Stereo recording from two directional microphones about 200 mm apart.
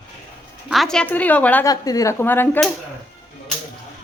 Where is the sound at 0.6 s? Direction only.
Centre (ahead or behind).